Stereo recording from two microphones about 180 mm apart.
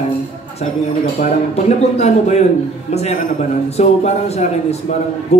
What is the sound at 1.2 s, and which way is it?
A man's voice, 40° left (ahead or behind).